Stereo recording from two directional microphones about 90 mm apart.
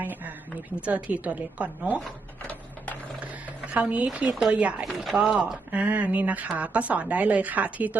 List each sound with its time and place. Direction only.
0.0 s a sound: 20° right (ahead or behind)
0.8 s a woman's voice: 15° right (ahead or behind)
2.5 s printer: 15° left (ahead or behind)
3.7 s a woman's voice: 15° right (ahead or behind)
4.9 s chopping: centre (ahead or behind)
5.1 s a woman's voice: 10° right (ahead or behind)
5.7 s a woman's voice: 15° right (ahead or behind)